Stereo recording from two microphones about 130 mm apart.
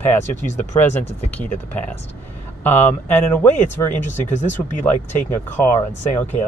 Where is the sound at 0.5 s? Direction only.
15° left (ahead or behind).